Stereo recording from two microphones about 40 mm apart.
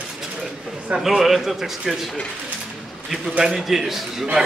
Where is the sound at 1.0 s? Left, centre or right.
Centre.